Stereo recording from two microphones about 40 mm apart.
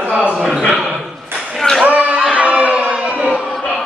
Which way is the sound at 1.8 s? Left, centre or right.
Right.